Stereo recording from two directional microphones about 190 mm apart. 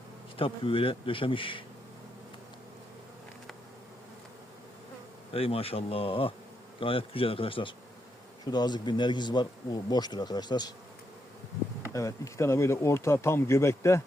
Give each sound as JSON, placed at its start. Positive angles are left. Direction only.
{"t": 0.3, "sound": "speech", "side_deg": 30}
{"t": 5.3, "sound": "speech", "side_deg": 30}
{"t": 11.8, "sound": "speech", "side_deg": 15}